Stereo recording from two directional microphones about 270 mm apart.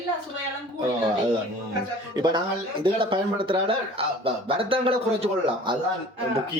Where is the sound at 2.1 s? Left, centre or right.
Centre.